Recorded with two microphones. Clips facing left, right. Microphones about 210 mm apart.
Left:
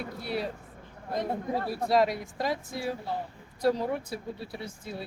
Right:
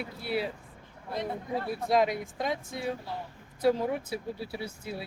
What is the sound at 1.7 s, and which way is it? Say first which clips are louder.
Speech: left 1 dB; centre (ahead or behind).